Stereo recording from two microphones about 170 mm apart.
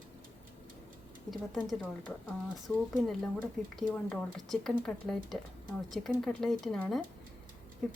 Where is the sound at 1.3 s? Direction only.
Centre (ahead or behind).